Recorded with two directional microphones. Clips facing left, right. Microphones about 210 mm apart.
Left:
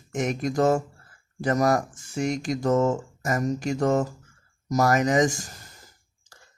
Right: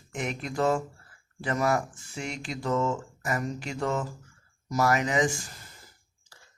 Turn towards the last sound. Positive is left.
turn(degrees=45)  # may be behind; listen again after turning